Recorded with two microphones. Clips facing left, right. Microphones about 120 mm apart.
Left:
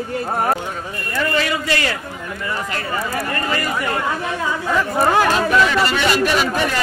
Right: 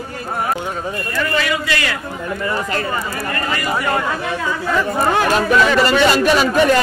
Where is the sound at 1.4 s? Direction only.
30° left (ahead or behind).